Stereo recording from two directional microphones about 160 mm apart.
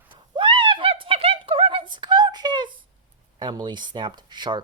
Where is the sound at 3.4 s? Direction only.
25° right (ahead or behind).